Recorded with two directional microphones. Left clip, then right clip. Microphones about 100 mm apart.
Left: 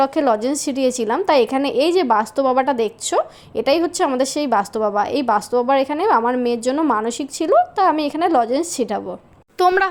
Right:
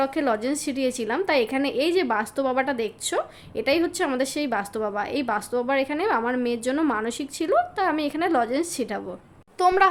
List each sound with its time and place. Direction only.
0.0 s a woman's voice: 35° left (ahead or behind)
9.6 s speech: 45° left (ahead or behind)